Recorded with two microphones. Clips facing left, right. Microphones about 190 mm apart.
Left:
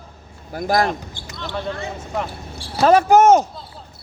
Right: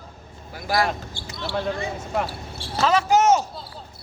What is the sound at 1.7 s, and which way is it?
Speech, 15° right (ahead or behind).